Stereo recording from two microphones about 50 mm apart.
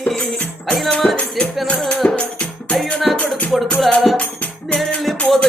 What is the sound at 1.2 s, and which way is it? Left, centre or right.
Music, left.